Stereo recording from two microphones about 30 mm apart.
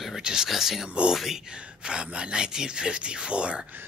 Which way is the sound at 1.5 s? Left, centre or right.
Right.